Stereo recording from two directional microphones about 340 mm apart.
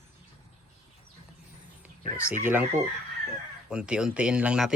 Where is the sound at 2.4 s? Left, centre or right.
Centre.